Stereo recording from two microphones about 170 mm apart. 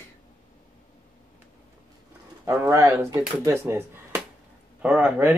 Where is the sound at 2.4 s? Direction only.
20° right (ahead or behind).